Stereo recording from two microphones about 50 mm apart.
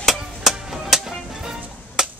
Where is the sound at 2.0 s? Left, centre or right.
Centre.